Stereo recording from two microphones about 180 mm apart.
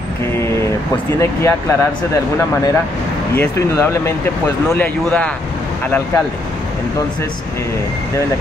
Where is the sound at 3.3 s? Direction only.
15° left (ahead or behind).